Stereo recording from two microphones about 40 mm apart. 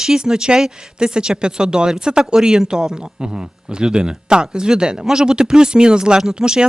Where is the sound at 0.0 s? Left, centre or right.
Centre.